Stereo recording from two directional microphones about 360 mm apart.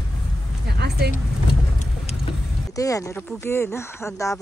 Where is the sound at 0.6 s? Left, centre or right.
Right.